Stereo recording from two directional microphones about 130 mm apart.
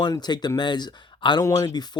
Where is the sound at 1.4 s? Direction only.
25° left (ahead or behind).